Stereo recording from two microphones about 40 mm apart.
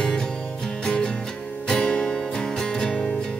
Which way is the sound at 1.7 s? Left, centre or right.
Left.